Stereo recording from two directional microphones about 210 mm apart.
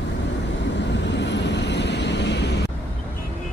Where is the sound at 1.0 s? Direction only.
55° left (ahead or behind).